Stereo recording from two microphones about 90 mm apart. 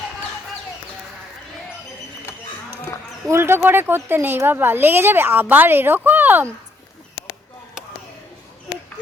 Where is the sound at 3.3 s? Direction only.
25° right (ahead or behind).